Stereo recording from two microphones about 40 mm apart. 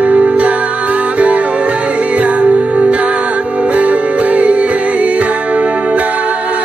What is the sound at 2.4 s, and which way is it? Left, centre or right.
Music, right.